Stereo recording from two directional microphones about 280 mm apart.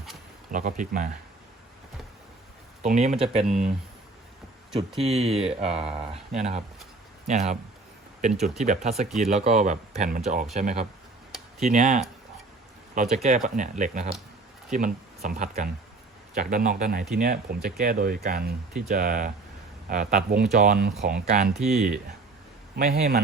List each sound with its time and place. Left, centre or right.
0.5 s speech: right
2.8 s speech: right
4.9 s speech: right
8.3 s speech: centre
8.5 s speech: right
9.0 s speech: centre
9.3 s speech: right
13.6 s speech: right
21.6 s speech: centre
22.7 s speech: right